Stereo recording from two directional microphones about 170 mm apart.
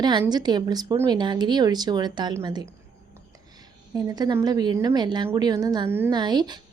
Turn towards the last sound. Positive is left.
turn(degrees=-25)  # may be behind; listen again after turning